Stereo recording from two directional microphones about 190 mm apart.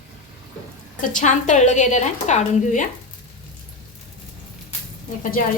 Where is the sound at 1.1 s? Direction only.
40° left (ahead or behind).